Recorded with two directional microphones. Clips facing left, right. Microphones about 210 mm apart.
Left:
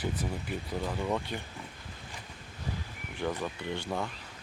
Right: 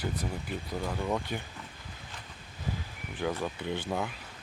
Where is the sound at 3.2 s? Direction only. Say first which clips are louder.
Right 1 dB; 5° right (ahead or behind).